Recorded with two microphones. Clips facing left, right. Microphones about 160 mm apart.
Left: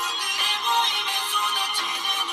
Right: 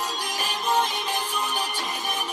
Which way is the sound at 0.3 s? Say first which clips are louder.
Right 2 dB; 40° right (ahead or behind).